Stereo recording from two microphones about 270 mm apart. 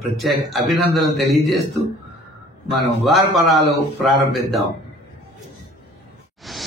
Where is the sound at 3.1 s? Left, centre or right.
Centre.